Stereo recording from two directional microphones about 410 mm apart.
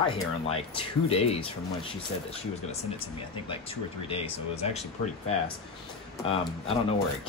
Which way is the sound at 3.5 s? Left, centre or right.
Centre.